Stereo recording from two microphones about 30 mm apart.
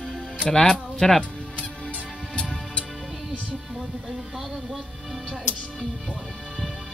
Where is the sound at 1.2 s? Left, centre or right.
Left.